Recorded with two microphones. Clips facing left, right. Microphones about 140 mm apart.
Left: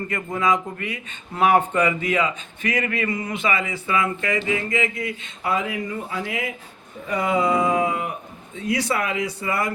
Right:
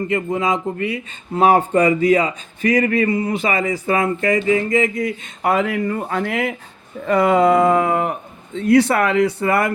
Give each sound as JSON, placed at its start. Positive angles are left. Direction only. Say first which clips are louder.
{"t": 0.1, "sound": "a man's voice", "louder": "right 1 dB", "side_deg": -25}
{"t": 5.4, "sound": "speech", "louder": "right 7 dB", "side_deg": -65}